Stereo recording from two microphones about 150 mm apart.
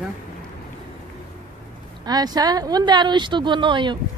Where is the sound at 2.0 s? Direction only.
25° right (ahead or behind).